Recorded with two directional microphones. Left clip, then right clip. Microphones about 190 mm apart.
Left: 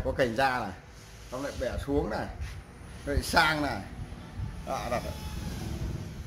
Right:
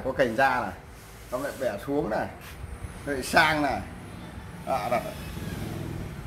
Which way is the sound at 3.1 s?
25° left (ahead or behind).